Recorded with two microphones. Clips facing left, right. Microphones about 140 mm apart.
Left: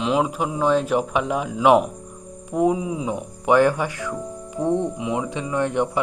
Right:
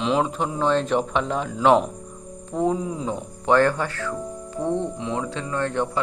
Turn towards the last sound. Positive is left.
turn(degrees=15)  # may be behind; listen again after turning